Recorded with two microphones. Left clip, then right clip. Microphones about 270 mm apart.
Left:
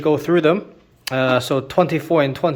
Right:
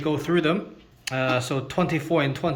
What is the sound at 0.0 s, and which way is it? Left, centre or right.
Speech, centre.